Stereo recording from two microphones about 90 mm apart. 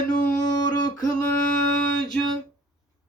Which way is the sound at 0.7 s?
50° left (ahead or behind).